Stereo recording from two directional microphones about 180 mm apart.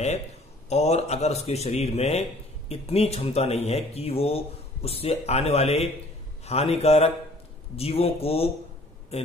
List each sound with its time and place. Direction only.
0.7 s speech: 35° left (ahead or behind)